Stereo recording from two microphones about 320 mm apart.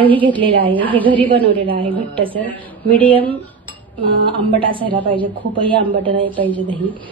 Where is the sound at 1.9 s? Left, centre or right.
Centre.